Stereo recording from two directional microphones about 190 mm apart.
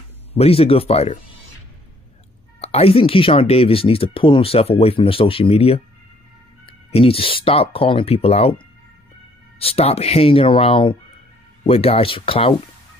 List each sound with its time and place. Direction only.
0.3 s speech: 30° left (ahead or behind)
2.6 s speech: 30° left (ahead or behind)